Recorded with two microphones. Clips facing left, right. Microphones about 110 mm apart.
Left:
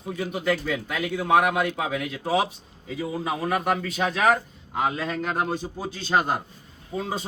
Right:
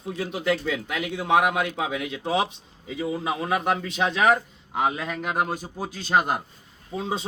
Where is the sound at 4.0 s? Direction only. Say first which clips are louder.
Right 1 dB; 25° right (ahead or behind); by 7.1 s 5° right (ahead or behind).